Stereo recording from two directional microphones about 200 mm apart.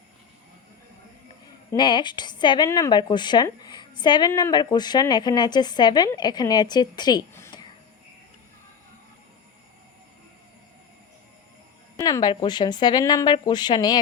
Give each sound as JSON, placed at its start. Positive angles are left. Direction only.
{"t": 1.7, "sound": "a woman's voice", "side_deg": 20}
{"t": 11.9, "sound": "a woman's voice", "side_deg": 15}